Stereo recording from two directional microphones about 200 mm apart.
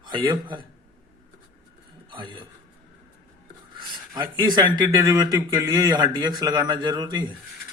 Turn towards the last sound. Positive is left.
turn(degrees=-20)  # may be behind; listen again after turning